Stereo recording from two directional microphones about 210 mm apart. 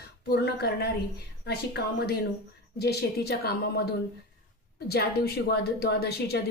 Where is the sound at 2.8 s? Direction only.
50° left (ahead or behind).